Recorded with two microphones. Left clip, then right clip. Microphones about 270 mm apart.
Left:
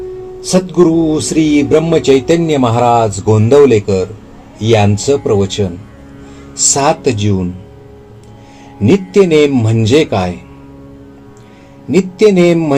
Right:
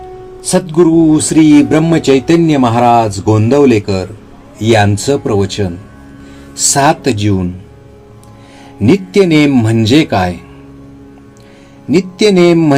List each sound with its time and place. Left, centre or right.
0.4 s speech: right
8.9 s speech: right
11.9 s speech: right